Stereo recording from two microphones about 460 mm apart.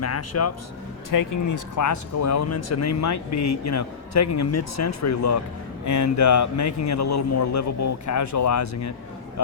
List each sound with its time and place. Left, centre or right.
0.0 s speech: left
1.1 s speech: left